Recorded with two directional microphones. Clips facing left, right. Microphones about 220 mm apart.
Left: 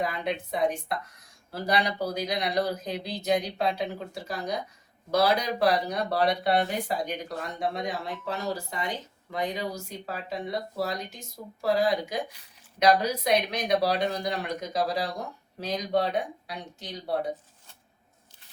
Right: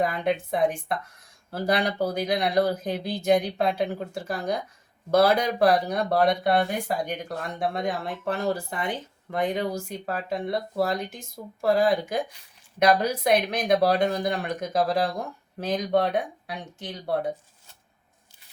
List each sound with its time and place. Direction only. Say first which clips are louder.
0.0 s speech: right 5 dB; 50° right (ahead or behind)